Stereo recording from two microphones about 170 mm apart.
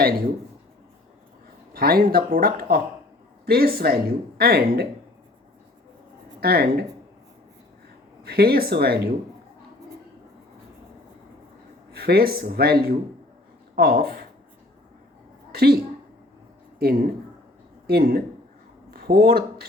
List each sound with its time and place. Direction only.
1.7 s speech: 60° right (ahead or behind)
6.4 s speech: 65° right (ahead or behind)
8.2 s speech: 65° right (ahead or behind)
11.9 s speech: 65° right (ahead or behind)
15.5 s speech: 65° right (ahead or behind)
16.8 s speech: 60° right (ahead or behind)
18.9 s a sound: 65° right (ahead or behind)